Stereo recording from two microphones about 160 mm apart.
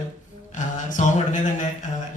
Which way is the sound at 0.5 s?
50° left (ahead or behind).